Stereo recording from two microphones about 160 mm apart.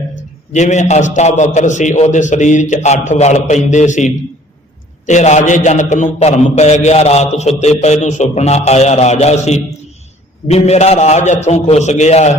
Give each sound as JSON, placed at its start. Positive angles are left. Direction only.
{"t": 0.5, "sound": "a man's voice", "side_deg": 45}